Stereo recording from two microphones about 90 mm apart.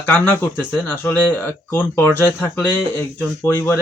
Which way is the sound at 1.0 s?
25° left (ahead or behind).